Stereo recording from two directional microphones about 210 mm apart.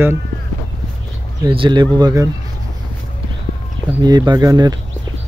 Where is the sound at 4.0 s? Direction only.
20° right (ahead or behind).